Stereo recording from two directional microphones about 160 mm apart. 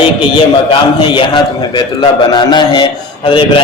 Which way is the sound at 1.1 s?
30° left (ahead or behind).